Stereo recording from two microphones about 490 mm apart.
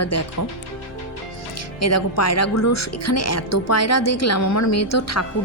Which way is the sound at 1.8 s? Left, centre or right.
Left.